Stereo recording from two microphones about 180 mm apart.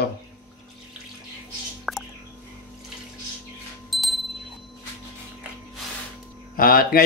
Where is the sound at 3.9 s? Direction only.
Centre (ahead or behind).